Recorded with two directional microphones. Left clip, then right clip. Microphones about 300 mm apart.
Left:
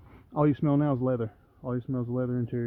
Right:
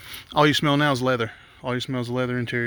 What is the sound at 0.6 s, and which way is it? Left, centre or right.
Speech, centre.